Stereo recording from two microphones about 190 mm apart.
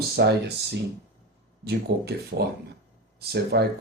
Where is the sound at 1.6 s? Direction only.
60° right (ahead or behind).